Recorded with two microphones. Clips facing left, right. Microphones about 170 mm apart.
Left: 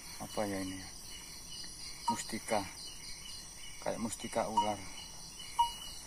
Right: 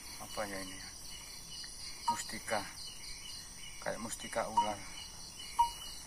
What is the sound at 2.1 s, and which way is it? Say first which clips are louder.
Cricket: left 3 dB; 20° left (ahead or behind).